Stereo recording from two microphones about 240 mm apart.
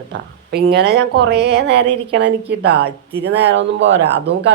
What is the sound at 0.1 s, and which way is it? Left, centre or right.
Speech, right.